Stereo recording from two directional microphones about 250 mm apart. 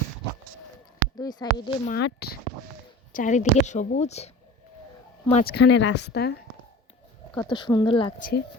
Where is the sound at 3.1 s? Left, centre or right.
Left.